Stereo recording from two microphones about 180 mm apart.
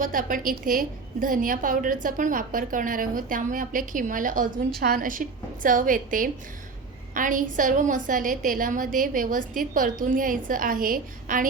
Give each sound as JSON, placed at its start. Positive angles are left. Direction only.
{"t": 0.0, "sound": "a woman's voice", "side_deg": -50}